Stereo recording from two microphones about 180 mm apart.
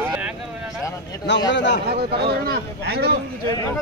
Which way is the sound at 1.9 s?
60° right (ahead or behind).